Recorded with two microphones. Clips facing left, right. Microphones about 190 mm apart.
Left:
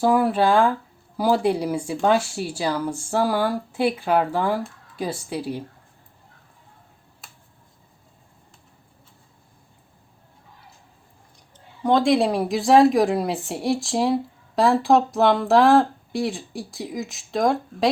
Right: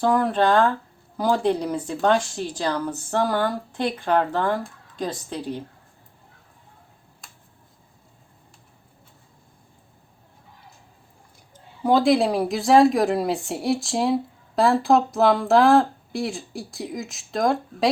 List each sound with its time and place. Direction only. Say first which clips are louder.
0.0 s speech: left 1 dB; 10° left (ahead or behind)
11.5 s speech: even; 5° right (ahead or behind)